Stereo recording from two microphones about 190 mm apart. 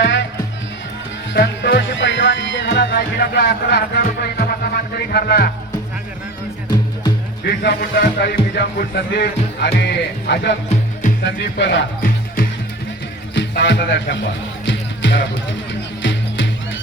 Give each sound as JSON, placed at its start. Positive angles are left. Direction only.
{"t": 0.0, "sound": "music", "side_deg": 70}
{"t": 1.3, "sound": "speech", "side_deg": 60}
{"t": 7.4, "sound": "speech", "side_deg": 60}
{"t": 13.3, "sound": "music", "side_deg": 65}